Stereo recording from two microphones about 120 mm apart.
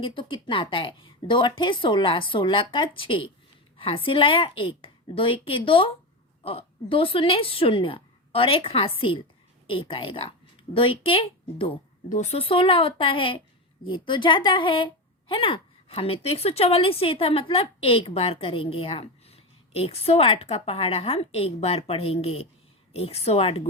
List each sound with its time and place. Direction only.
0.0 s a woman's voice: 45° left (ahead or behind)
12.0 s speech: 90° left
12.4 s a woman's voice: 50° left (ahead or behind)